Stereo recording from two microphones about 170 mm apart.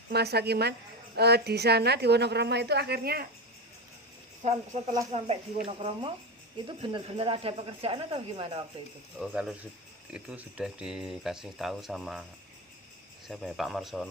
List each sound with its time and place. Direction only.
0.1 s a woman's voice: 70° right (ahead or behind)
5.1 s speech: 35° right (ahead or behind)
9.1 s speech: 5° right (ahead or behind)
13.2 s speech: centre (ahead or behind)